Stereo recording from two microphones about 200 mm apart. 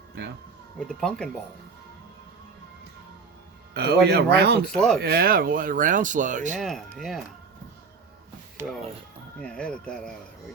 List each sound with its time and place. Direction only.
0.2 s speech: 55° right (ahead or behind)
0.9 s speech: 5° left (ahead or behind)
3.8 s speech: 55° right (ahead or behind)
4.7 s speech: 5° left (ahead or behind)
4.9 s speech: 50° right (ahead or behind)
6.6 s speech: centre (ahead or behind)
9.4 s speech: 5° left (ahead or behind)